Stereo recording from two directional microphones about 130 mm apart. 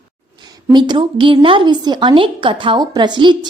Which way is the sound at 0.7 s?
35° right (ahead or behind).